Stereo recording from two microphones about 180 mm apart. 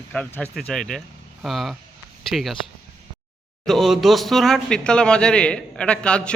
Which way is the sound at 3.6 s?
Centre (ahead or behind).